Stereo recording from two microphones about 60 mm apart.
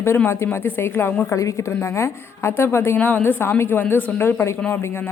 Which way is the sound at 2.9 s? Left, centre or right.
Left.